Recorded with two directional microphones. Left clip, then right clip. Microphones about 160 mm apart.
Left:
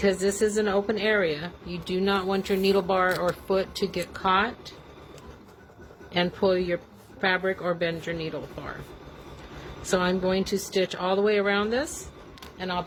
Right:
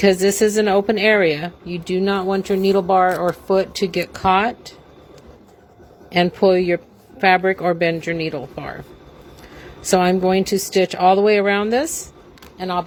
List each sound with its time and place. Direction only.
0.0 s speech: 50° right (ahead or behind)
6.1 s speech: 40° right (ahead or behind)
9.9 s speech: 50° right (ahead or behind)